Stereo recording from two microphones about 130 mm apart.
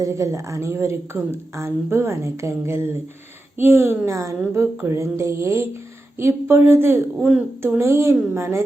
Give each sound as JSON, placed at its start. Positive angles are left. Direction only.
{"t": 0.0, "sound": "a woman's voice", "side_deg": -20}